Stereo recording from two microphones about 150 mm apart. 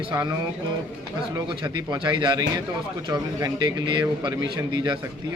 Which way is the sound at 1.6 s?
30° right (ahead or behind).